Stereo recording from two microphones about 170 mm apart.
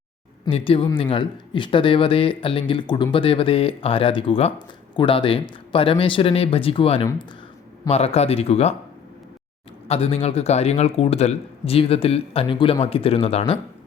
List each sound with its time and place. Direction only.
0.4 s speech: 35° left (ahead or behind)
9.9 s speech: 35° left (ahead or behind)